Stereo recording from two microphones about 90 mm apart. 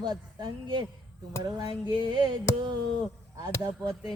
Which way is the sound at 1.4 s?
45° right (ahead or behind).